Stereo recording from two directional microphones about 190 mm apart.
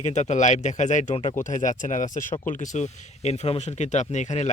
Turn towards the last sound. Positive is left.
turn(degrees=40)  # may be behind; listen again after turning